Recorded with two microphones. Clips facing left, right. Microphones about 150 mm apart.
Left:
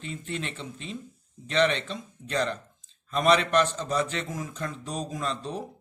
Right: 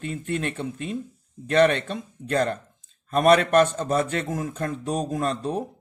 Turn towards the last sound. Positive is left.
turn(degrees=-50)  # may be behind; listen again after turning